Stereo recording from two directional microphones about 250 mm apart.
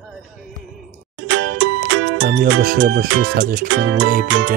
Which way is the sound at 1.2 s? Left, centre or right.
Right.